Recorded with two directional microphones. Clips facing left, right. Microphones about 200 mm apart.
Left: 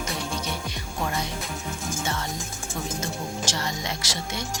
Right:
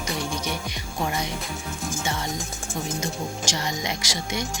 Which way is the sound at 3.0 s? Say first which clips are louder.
Right 1 dB; 15° right (ahead or behind).